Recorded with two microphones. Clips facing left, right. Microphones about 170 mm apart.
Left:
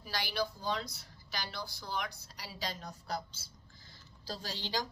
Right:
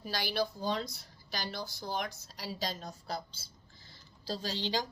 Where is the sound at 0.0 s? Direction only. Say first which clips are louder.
Right 3 dB; 50° right (ahead or behind); by 3.2 s 30° right (ahead or behind).